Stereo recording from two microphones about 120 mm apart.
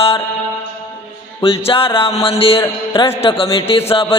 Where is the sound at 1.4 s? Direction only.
50° left (ahead or behind).